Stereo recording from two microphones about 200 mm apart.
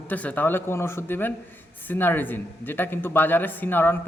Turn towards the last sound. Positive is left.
turn(degrees=10)  # may be behind; listen again after turning